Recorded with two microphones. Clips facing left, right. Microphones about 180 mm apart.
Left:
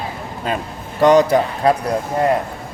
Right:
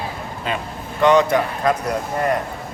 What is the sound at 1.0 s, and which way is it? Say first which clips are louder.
Speech: left 3 dB; 40° left (ahead or behind).